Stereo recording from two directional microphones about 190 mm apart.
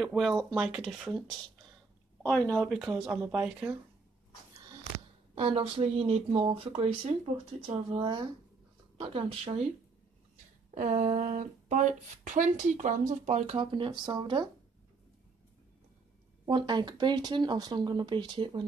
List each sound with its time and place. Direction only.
0.0 s speech: centre (ahead or behind)
2.2 s speech: 5° left (ahead or behind)
2.8 s speech: 5° right (ahead or behind)
4.6 s speech: 25° right (ahead or behind)
10.7 s speech: 40° right (ahead or behind); by 14.5 s 20° right (ahead or behind)
16.4 s speech: 20° right (ahead or behind)